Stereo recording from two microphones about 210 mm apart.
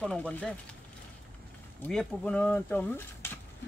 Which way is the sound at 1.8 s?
5° left (ahead or behind).